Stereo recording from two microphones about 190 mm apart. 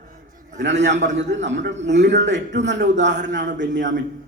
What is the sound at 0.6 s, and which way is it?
A man's voice, 70° right (ahead or behind).